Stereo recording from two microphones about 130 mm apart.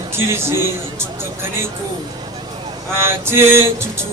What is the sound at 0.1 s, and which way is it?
Music, 20° right (ahead or behind).